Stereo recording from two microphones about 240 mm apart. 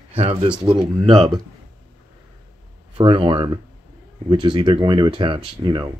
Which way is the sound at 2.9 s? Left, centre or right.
Right.